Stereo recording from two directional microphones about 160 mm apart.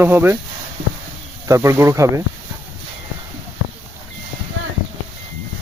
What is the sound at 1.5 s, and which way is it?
Speech, 20° right (ahead or behind).